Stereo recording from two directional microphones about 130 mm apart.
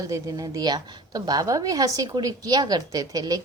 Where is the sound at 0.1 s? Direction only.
25° right (ahead or behind).